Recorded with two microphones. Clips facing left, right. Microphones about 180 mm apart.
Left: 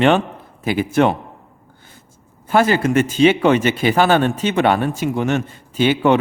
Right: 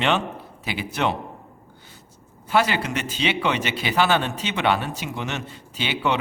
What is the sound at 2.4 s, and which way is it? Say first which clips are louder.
Speech: left 6 dB; 45° left (ahead or behind).